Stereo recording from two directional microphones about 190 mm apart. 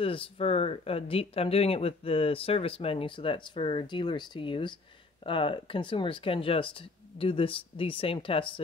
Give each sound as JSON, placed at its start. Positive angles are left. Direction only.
{"t": 0.0, "sound": "speech", "side_deg": 30}